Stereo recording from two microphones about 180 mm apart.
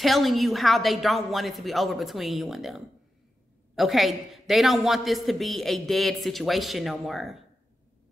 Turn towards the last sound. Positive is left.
turn(degrees=0)  # may be behind; listen again after turning